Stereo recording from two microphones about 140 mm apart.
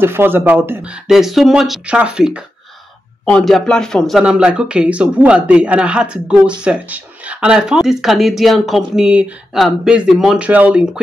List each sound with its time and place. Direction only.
0.0 s speech: 15° right (ahead or behind)
1.0 s speech: centre (ahead or behind)